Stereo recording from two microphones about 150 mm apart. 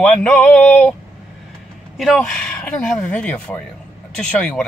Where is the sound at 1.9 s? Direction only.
Centre (ahead or behind).